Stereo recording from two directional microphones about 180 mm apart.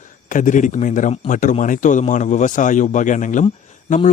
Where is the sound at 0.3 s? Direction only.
45° left (ahead or behind).